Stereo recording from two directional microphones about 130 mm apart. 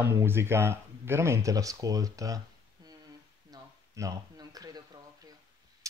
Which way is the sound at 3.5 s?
25° right (ahead or behind).